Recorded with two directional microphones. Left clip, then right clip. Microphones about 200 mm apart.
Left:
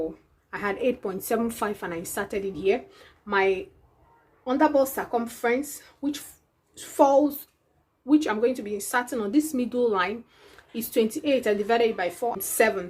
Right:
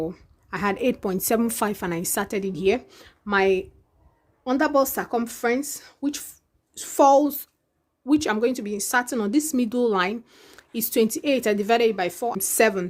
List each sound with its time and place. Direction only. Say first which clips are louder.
0.1 s a woman's voice: right 4 dB; 55° right (ahead or behind)